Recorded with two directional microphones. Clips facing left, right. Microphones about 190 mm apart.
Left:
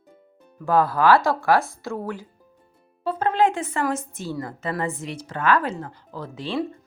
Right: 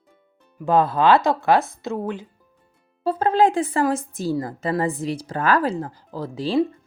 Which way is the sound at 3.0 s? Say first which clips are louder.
Right 3 dB; 35° right (ahead or behind).